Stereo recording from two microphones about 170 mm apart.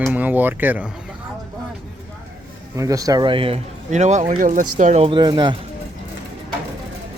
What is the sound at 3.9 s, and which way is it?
Speech, 45° right (ahead or behind).